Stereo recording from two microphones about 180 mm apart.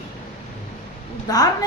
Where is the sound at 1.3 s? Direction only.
20° left (ahead or behind).